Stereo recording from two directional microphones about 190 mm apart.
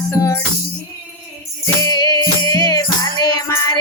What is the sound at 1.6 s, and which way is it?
Music, 20° left (ahead or behind).